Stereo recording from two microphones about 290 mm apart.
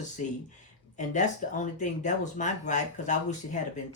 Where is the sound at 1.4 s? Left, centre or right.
Left.